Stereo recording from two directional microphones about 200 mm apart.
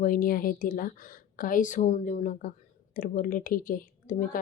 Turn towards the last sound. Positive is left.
turn(degrees=45)  # may be behind; listen again after turning